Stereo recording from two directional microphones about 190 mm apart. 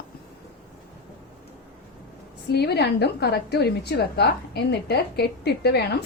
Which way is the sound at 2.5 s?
60° left (ahead or behind).